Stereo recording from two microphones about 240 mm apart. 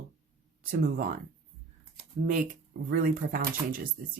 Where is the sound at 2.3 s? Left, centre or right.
Right.